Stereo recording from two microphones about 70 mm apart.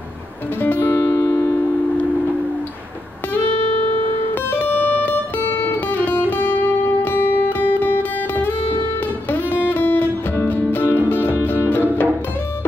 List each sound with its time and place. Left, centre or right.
0.6 s music: left
1.3 s music: left
4.5 s music: left